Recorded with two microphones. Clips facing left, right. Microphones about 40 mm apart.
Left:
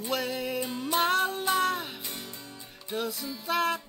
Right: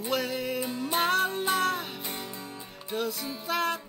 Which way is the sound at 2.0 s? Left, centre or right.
Centre.